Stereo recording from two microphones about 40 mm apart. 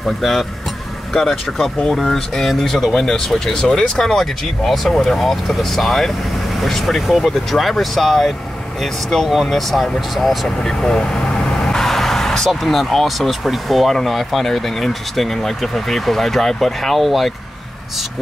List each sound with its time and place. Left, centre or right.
0.0 s speech: centre
1.9 s speech: centre
10.6 s vehicle: centre
11.8 s speech: centre